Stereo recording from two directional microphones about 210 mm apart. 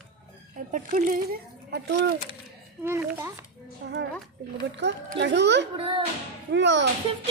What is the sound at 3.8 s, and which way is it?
A child's voice, 55° right (ahead or behind).